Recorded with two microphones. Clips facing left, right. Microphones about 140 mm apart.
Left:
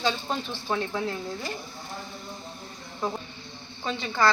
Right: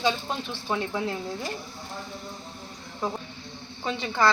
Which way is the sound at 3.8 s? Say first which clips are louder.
Right 1 dB; 15° right (ahead or behind).